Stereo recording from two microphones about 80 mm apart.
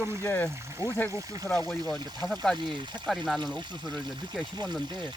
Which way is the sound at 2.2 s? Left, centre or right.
Centre.